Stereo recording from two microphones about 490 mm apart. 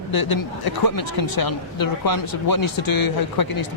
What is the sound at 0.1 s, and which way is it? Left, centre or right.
Speech, left.